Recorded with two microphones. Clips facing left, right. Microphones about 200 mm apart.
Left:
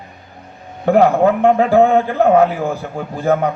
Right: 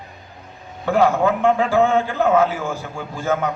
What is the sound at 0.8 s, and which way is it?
Speech, 60° left (ahead or behind).